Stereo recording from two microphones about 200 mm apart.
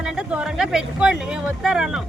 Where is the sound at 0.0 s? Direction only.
5° right (ahead or behind).